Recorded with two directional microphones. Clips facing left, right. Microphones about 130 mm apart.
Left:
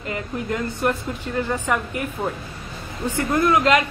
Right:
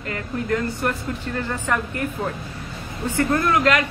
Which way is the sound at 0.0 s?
20° left (ahead or behind).